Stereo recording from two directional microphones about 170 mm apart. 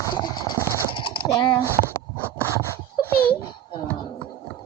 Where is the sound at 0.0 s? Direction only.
25° left (ahead or behind).